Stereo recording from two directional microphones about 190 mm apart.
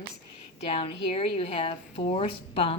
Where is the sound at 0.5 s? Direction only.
30° left (ahead or behind).